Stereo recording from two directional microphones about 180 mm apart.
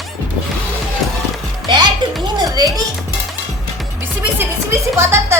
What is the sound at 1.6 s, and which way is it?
A child's voice, 25° right (ahead or behind).